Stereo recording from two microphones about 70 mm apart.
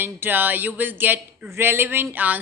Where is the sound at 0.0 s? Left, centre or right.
Right.